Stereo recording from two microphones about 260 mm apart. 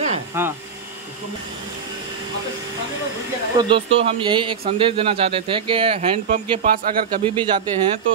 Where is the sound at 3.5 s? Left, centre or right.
Right.